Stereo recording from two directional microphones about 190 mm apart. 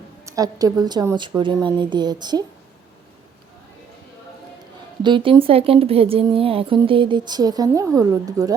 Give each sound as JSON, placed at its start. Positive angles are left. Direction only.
{"t": 0.3, "sound": "speech", "side_deg": -20}
{"t": 5.0, "sound": "speech", "side_deg": -25}